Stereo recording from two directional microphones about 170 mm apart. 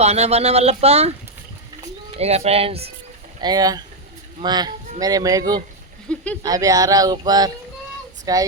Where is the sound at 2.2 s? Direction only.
40° right (ahead or behind).